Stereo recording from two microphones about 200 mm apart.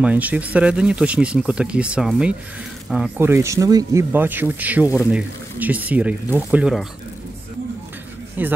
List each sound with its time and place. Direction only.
0.0 s speech: 10° right (ahead or behind)
8.4 s speech: 10° right (ahead or behind)